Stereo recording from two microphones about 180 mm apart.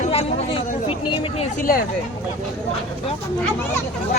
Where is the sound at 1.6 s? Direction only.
55° left (ahead or behind).